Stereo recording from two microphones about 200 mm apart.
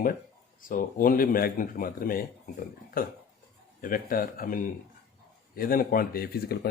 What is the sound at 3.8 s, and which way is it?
Speech, 45° left (ahead or behind).